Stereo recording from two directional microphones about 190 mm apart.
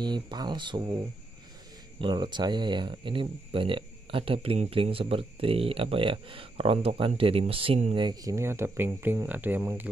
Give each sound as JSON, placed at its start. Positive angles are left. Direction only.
{"t": 0.0, "sound": "speech", "side_deg": -25}